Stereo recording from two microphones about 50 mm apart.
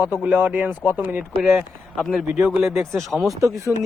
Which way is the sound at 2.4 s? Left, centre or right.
Centre.